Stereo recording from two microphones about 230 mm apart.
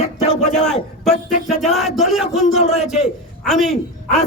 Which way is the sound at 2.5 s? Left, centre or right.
Left.